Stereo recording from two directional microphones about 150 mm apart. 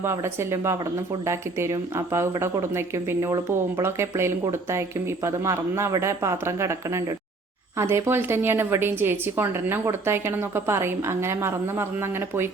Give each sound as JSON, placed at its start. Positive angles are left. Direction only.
{"t": 0.0, "sound": "a woman's voice", "side_deg": -15}